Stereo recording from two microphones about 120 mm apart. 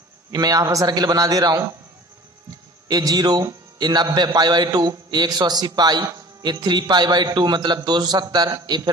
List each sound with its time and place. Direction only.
0.3 s a man's voice: 30° right (ahead or behind)
2.9 s a man's voice: 30° right (ahead or behind)